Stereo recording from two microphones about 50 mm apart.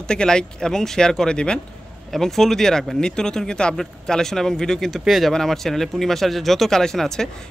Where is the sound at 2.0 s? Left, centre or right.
Centre.